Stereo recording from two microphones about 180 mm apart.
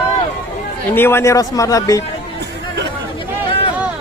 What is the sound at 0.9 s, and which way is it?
A man's voice, 10° left (ahead or behind).